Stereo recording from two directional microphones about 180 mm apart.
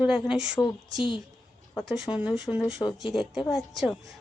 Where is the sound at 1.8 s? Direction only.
Centre (ahead or behind).